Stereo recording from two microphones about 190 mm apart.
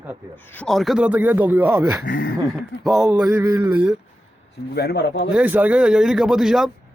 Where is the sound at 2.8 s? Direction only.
Centre (ahead or behind).